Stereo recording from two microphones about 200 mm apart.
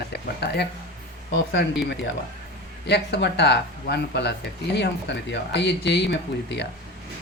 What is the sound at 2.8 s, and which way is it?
Speech, 55° left (ahead or behind).